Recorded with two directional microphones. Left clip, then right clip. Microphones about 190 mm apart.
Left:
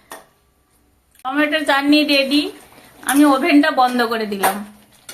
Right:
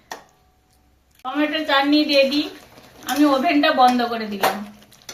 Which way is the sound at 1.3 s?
55° left (ahead or behind).